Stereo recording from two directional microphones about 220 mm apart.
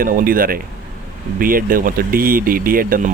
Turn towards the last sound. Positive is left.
turn(degrees=-40)  # may be behind; listen again after turning